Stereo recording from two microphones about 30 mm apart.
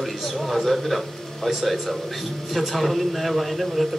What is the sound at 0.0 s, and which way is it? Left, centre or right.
A man's voice, centre.